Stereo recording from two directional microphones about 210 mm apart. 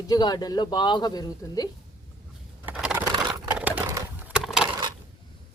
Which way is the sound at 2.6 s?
5° right (ahead or behind).